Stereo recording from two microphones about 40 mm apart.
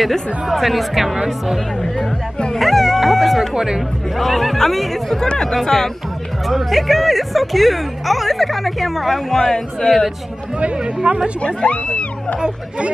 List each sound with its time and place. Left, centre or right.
0.5 s speech: centre
2.5 s speech: centre
3.5 s speech: centre
4.2 s speech: centre
10.8 s speech: right
11.4 s speech: left
12.4 s speech: right